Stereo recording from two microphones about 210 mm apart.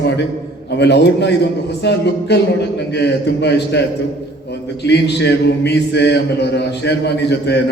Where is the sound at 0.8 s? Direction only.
55° left (ahead or behind).